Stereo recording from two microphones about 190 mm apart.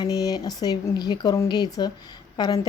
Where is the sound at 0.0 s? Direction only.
20° left (ahead or behind).